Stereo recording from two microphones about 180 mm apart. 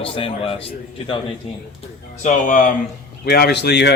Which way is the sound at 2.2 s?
45° left (ahead or behind).